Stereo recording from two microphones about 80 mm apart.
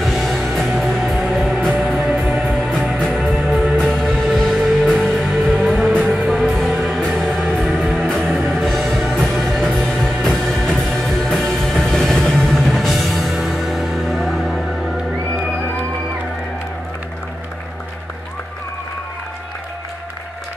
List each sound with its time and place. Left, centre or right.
0.0 s music: centre
5.5 s music: centre
6.3 s music: centre